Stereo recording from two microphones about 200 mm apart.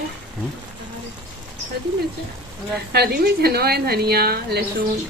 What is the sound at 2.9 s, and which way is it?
A woman's voice, 55° right (ahead or behind).